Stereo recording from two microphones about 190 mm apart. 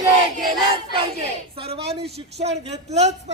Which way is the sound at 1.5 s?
30° right (ahead or behind).